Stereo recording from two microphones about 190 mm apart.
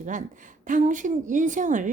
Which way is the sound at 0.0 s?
40° right (ahead or behind).